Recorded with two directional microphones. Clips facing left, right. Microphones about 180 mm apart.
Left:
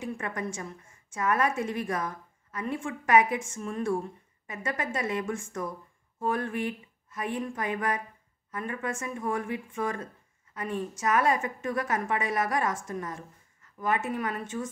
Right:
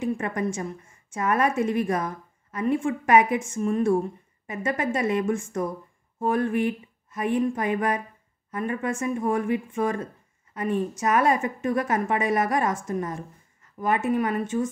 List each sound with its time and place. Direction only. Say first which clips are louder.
0.0 s a woman's voice: right 7 dB; 20° right (ahead or behind)